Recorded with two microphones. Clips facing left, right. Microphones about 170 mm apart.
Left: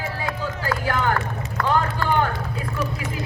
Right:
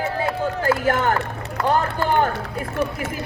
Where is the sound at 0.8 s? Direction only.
50° right (ahead or behind).